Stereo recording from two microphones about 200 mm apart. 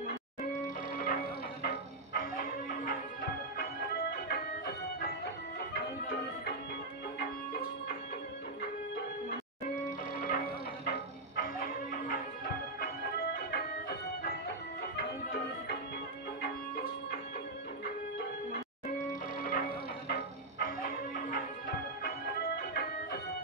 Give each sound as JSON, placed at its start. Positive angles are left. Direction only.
{"t": 0.9, "sound": "music", "side_deg": 45}
{"t": 10.1, "sound": "music", "side_deg": 45}
{"t": 20.1, "sound": "music", "side_deg": 45}